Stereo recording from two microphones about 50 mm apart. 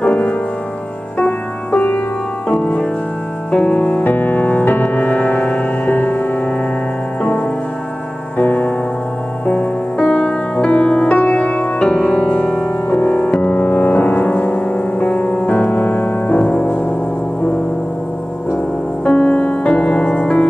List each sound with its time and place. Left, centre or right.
0.0 s music: left
1.7 s music: left
8.4 s music: left
11.9 s music: centre
12.9 s music: left
19.0 s music: left